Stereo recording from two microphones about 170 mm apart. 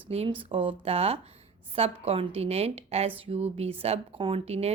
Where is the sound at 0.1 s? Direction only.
35° right (ahead or behind).